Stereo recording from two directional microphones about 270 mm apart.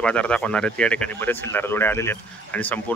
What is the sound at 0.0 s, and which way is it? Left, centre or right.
Speech, centre.